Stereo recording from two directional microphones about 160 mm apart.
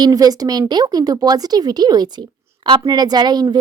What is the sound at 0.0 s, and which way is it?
Speech, 25° right (ahead or behind).